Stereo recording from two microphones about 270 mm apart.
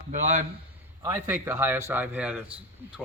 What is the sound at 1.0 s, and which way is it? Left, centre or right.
A man's voice, centre.